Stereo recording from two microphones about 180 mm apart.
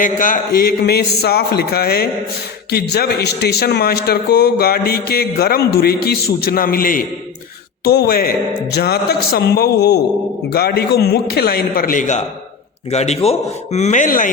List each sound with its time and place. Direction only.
0.0 s a man's voice: 50° left (ahead or behind)